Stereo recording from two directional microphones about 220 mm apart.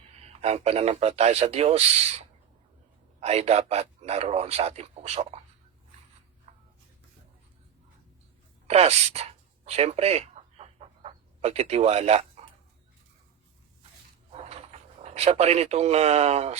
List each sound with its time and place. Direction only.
0.2 s a man's voice: 30° right (ahead or behind)
6.5 s a sound: 25° right (ahead or behind)
8.6 s a man's voice: 30° right (ahead or behind)
9.6 s chicken: 25° right (ahead or behind)
14.3 s speech: 30° right (ahead or behind)